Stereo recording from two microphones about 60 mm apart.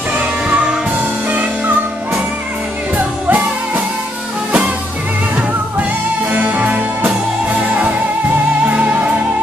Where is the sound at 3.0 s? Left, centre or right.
Right.